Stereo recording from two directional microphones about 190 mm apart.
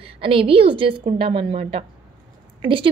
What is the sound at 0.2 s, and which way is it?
A woman's voice, 30° right (ahead or behind).